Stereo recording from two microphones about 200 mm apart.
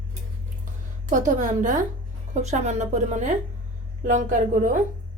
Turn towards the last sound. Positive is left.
turn(degrees=-40)  # may be behind; listen again after turning